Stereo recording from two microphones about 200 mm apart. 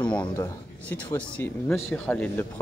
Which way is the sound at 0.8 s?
5° left (ahead or behind).